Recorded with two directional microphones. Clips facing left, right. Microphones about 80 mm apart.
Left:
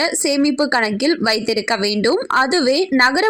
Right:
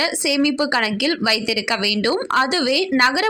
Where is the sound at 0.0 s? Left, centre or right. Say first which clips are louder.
Left 3 dB; left.